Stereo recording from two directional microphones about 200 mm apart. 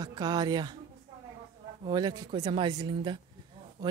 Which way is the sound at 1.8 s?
20° right (ahead or behind).